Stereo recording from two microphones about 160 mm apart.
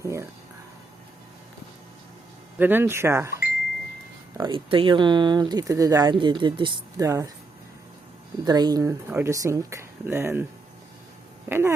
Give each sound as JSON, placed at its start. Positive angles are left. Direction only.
{"t": 0.0, "sound": "speech", "side_deg": -20}
{"t": 2.6, "sound": "speech", "side_deg": -10}
{"t": 4.4, "sound": "speech", "side_deg": -30}
{"t": 7.0, "sound": "speech", "side_deg": -20}
{"t": 8.4, "sound": "speech", "side_deg": -25}
{"t": 11.4, "sound": "speech", "side_deg": -15}